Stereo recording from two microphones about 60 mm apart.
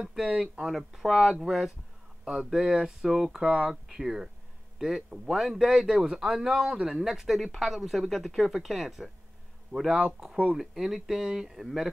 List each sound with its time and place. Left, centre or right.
0.0 s speech: centre
0.7 s speech: centre
9.8 s speech: centre
10.5 s speech: centre